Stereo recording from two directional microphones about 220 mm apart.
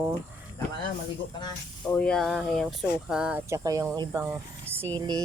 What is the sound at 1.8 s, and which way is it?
Speech, 5° left (ahead or behind).